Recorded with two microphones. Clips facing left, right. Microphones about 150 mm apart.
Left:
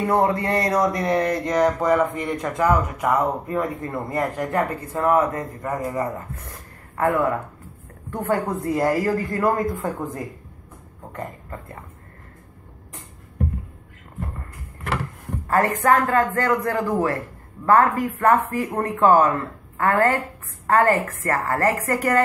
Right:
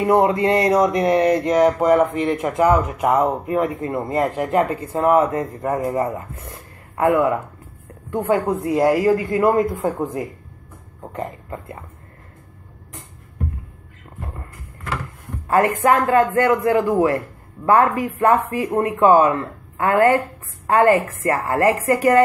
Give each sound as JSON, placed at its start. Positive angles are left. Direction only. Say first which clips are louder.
{"t": 0.0, "sound": "speech", "louder": "right 4 dB", "side_deg": -20}
{"t": 15.4, "sound": "speech", "louder": "right 3 dB", "side_deg": -20}